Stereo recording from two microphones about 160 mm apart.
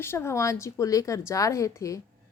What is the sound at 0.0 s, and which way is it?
A woman's voice, 15° left (ahead or behind).